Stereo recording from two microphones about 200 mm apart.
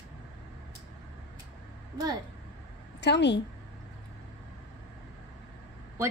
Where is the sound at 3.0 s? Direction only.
60° left (ahead or behind).